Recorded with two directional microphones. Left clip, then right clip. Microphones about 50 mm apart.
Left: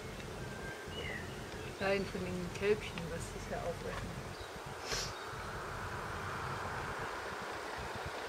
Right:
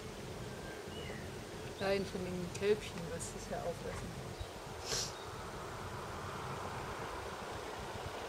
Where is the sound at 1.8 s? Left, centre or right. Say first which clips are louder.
Left 1 dB; centre.